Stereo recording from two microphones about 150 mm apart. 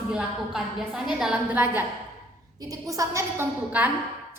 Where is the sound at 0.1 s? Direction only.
5° right (ahead or behind).